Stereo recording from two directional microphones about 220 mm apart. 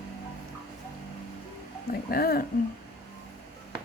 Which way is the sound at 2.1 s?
45° left (ahead or behind).